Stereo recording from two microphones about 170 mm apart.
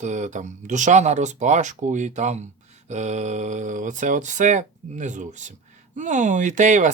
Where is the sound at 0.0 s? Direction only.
45° right (ahead or behind).